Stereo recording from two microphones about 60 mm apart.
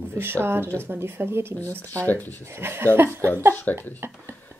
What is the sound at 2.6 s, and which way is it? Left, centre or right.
Speech, right.